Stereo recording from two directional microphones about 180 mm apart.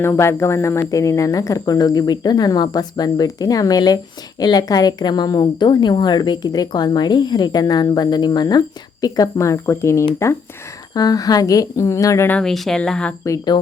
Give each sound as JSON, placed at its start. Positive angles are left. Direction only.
{"t": 0.0, "sound": "a woman's voice", "side_deg": 15}
{"t": 13.2, "sound": "speech", "side_deg": 20}